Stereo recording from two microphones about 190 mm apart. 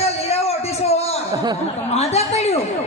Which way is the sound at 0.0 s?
35° left (ahead or behind).